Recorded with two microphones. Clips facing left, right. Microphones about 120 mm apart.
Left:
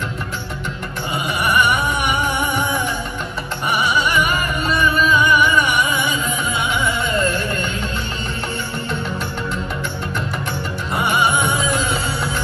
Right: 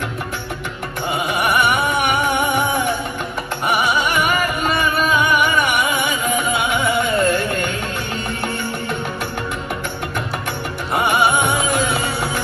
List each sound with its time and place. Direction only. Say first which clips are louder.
7.0 s music: right 3 dB; 55° right (ahead or behind)